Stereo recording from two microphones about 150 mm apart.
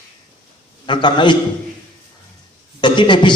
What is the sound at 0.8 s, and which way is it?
Speech, 30° left (ahead or behind).